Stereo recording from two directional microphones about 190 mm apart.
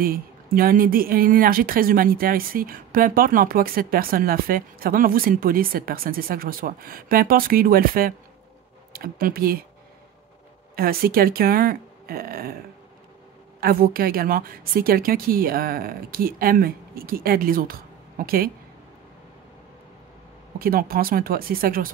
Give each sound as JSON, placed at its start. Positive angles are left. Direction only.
{"t": 0.0, "sound": "a woman's voice", "side_deg": -50}
{"t": 10.8, "sound": "a woman's voice", "side_deg": -50}
{"t": 13.6, "sound": "a woman's voice", "side_deg": -50}
{"t": 20.5, "sound": "a woman's voice", "side_deg": -50}